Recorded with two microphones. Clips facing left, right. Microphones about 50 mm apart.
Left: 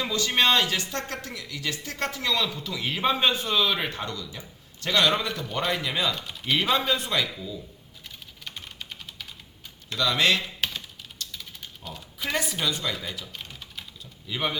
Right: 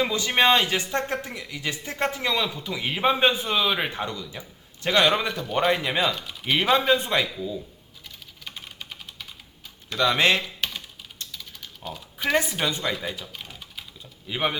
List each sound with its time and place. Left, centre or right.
0.0 s speech: right
5.5 s speech: right
8.4 s typing: centre
10.0 s speech: right
12.3 s speech: right
13.3 s typing: centre
14.3 s speech: right